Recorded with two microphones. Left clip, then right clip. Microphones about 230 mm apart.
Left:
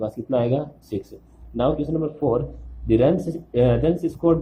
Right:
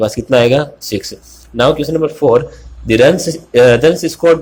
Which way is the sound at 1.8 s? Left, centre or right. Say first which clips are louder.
Right 11 dB; right.